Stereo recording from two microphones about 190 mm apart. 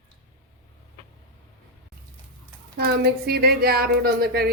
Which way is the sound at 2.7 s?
55° right (ahead or behind).